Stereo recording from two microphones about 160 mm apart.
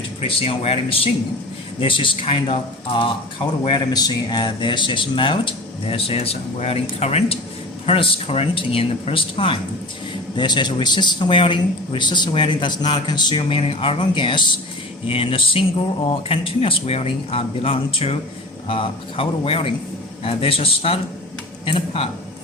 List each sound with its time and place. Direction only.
0.2 s speech: 35° left (ahead or behind)